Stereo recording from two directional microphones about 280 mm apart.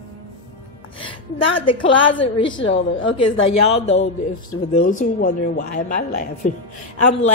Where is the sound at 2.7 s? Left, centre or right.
Left.